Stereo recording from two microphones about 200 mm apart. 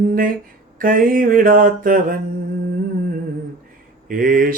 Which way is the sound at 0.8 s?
45° right (ahead or behind).